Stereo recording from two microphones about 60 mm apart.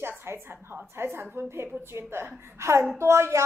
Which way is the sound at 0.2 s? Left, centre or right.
Right.